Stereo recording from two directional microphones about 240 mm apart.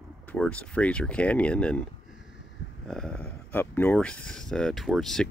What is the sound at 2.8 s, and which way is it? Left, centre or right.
Speech, centre.